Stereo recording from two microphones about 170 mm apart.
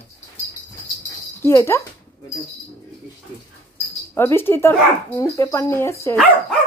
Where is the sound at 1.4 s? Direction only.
15° left (ahead or behind).